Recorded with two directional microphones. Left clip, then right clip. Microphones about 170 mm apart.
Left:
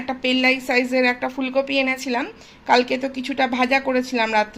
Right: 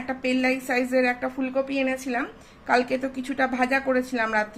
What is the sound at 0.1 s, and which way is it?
A woman's voice, 15° left (ahead or behind).